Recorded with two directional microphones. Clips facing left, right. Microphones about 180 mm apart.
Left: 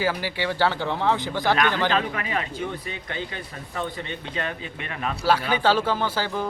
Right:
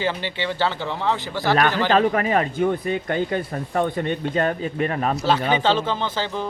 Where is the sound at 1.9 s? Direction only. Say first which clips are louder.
Right 7 dB; 45° right (ahead or behind).